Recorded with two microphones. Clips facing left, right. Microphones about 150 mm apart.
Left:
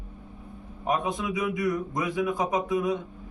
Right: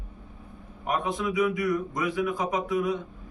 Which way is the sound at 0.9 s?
20° left (ahead or behind).